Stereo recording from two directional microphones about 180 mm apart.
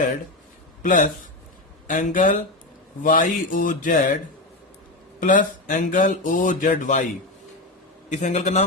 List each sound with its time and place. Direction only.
0.8 s speech: 45° left (ahead or behind)
5.2 s speech: 45° left (ahead or behind)
8.1 s a man's voice: 40° left (ahead or behind)